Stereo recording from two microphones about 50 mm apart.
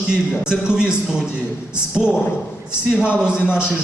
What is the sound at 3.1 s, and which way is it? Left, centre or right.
Speech, centre.